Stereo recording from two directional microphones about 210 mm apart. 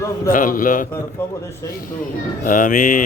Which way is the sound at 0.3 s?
40° left (ahead or behind).